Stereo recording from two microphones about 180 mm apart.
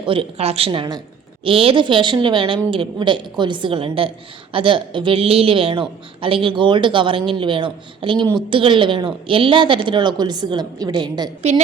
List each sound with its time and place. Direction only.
0.0 s a woman's voice: 30° right (ahead or behind)